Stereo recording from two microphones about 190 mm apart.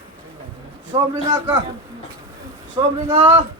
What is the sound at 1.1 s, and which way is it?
Speech, 20° right (ahead or behind).